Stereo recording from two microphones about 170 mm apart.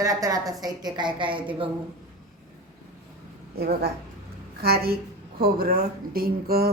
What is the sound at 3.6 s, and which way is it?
Speech, 70° right (ahead or behind).